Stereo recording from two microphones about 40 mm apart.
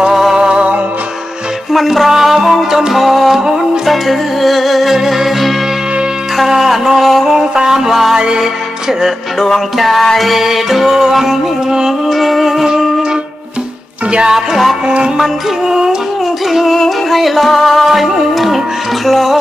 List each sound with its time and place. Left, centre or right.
0.1 s music: centre
0.4 s music: right
1.7 s music: centre
9.4 s music: centre
14.1 s music: centre
16.5 s music: centre
17.8 s music: centre